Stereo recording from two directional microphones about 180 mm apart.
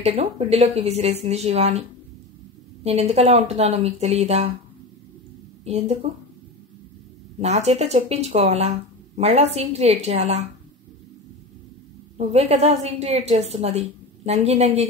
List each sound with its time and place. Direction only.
0.0 s a woman's voice: 35° right (ahead or behind)
2.8 s a woman's voice: 35° right (ahead or behind)
7.3 s a woman's voice: 35° right (ahead or behind)
12.2 s a woman's voice: 35° right (ahead or behind)